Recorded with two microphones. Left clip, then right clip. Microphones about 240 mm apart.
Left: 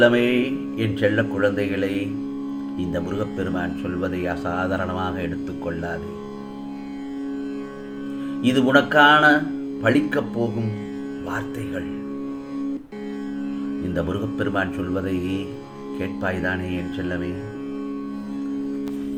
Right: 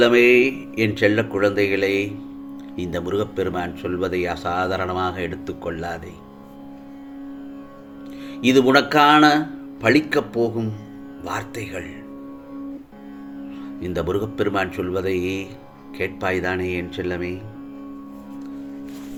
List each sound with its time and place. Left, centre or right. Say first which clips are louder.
0.0 s speech: right 4 dB; right
8.4 s speech: right 3 dB; right
13.9 s speech: right 5 dB; right